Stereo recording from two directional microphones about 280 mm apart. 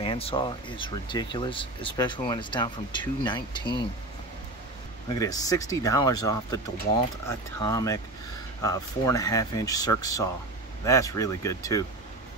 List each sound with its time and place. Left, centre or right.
0.0 s speech: centre
5.1 s speech: centre